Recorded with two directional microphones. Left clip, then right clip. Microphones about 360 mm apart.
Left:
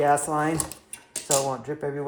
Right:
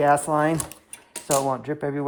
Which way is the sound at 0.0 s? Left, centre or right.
Centre.